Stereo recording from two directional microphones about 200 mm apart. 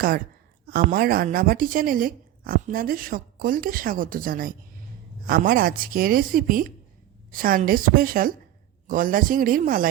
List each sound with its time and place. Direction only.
0.7 s speech: 45° right (ahead or behind)